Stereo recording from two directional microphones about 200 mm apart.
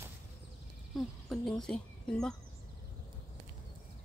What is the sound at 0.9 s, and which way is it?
Speech, centre (ahead or behind).